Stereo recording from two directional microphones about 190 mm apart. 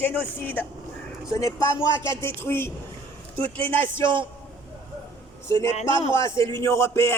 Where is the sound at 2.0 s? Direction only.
10° left (ahead or behind).